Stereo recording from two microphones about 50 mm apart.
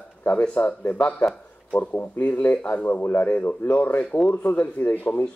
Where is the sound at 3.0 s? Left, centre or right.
Left.